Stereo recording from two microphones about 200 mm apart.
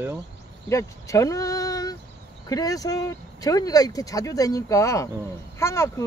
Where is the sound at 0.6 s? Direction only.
15° left (ahead or behind).